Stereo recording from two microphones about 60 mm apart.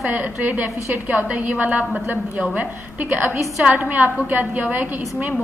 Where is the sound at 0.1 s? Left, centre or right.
Right.